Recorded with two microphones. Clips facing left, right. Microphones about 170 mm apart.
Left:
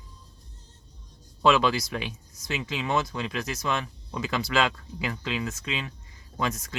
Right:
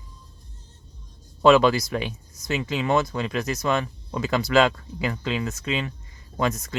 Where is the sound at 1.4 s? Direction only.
45° right (ahead or behind).